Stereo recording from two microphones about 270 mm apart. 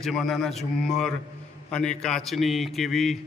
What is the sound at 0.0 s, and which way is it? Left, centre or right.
A man's voice, centre.